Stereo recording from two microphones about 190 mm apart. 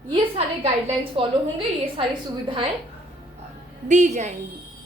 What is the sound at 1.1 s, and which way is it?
A woman's voice, 30° right (ahead or behind).